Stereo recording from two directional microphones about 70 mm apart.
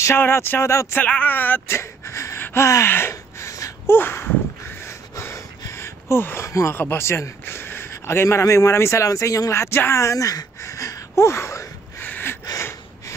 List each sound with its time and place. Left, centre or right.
0.2 s speech: left
0.9 s speech: left
1.8 s speech: left
2.4 s gasp: left
3.8 s a sound: left
6.5 s speech: left
12.0 s gasp: left
12.5 s snort: left